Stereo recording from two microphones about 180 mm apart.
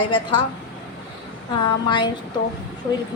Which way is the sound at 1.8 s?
25° left (ahead or behind).